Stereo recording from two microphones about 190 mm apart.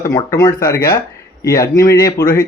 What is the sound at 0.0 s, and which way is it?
Speech, 20° left (ahead or behind).